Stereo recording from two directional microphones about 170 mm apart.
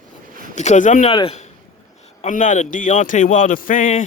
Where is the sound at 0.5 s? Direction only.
45° left (ahead or behind).